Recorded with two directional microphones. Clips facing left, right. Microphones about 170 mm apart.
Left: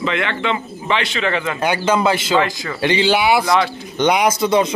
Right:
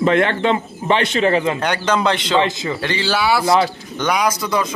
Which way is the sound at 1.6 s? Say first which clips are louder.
Left 2 dB; 10° left (ahead or behind).